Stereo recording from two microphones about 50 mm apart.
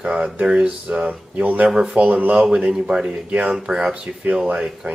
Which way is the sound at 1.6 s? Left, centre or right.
Centre.